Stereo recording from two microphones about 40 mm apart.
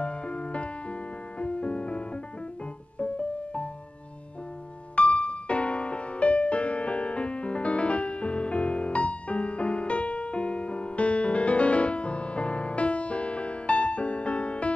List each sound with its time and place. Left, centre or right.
0.0 s music: left
4.9 s music: left